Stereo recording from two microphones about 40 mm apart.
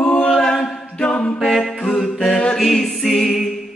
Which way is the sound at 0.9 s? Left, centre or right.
Left.